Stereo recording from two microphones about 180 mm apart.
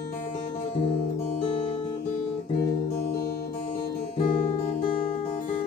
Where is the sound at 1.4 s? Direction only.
30° left (ahead or behind).